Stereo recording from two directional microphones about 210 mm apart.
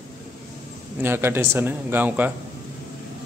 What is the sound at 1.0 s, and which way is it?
A man's voice, 10° right (ahead or behind).